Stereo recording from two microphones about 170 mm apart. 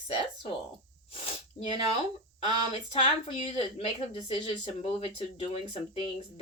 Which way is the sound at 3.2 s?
35° left (ahead or behind).